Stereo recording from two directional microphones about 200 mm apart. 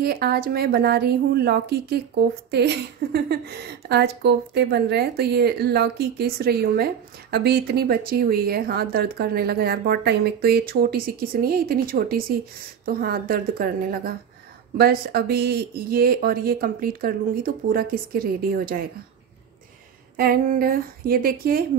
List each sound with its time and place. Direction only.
0.0 s a woman's voice: 50° right (ahead or behind)
20.2 s a woman's voice: 45° right (ahead or behind)